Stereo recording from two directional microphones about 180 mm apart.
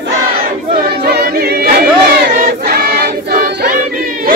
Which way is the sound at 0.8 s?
65° right (ahead or behind).